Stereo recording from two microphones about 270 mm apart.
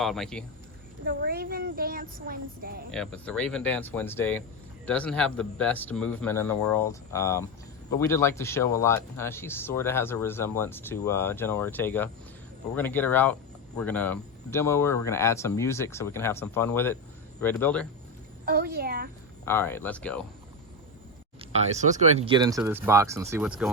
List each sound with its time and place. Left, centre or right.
0.0 s a man's voice: centre
1.0 s a woman's voice: right
2.9 s a man's voice: centre
18.4 s a woman's voice: right
19.5 s speech: centre
21.5 s speech: right; by 23.6 s centre